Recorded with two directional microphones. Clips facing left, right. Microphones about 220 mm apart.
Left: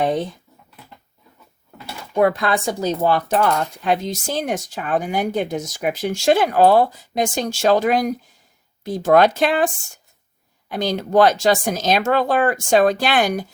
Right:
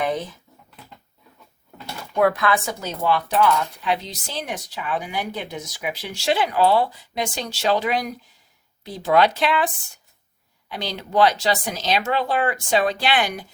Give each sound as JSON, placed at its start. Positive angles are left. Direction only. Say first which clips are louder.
{"t": 2.1, "sound": "a woman's voice", "louder": "left 2 dB", "side_deg": 30}
{"t": 3.0, "sound": "speech", "louder": "even", "side_deg": 45}